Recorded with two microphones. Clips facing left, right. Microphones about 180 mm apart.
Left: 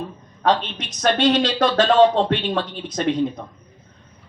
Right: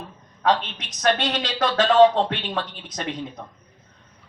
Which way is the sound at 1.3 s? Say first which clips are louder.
Left 6 dB; 30° left (ahead or behind).